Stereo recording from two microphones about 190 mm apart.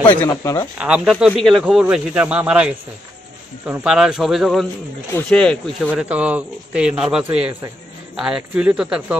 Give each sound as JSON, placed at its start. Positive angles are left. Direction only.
{"t": 0.0, "sound": "speech", "side_deg": 15}
{"t": 0.7, "sound": "speech", "side_deg": -5}
{"t": 5.9, "sound": "speech", "side_deg": -5}